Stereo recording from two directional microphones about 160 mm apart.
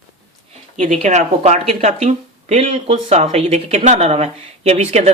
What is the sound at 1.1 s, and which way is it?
Speech, 45° right (ahead or behind).